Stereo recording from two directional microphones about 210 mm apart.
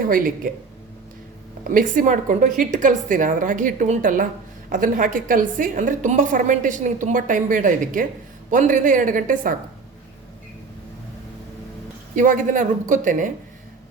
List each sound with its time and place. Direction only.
0.0 s a woman's voice: 40° right (ahead or behind)
1.7 s a woman's voice: 40° right (ahead or behind)
12.1 s a woman's voice: 40° right (ahead or behind)